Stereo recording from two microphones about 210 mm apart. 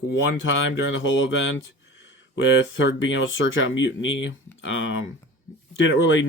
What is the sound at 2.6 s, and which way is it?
Speech, 60° left (ahead or behind).